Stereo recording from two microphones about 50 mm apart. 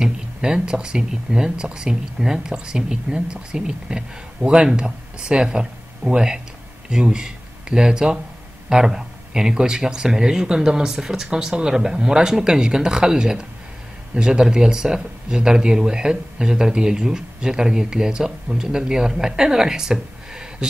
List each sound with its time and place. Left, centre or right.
0.0 s speech: centre